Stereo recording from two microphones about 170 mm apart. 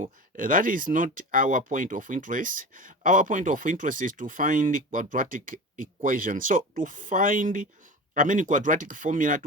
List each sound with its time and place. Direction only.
0.0 s speech: 50° right (ahead or behind)